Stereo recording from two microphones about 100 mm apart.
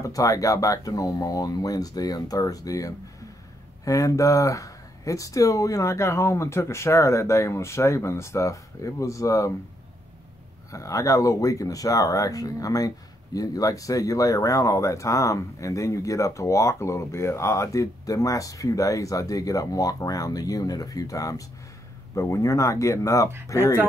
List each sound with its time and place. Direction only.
0.0 s speech: 35° left (ahead or behind)
10.7 s speech: 35° left (ahead or behind)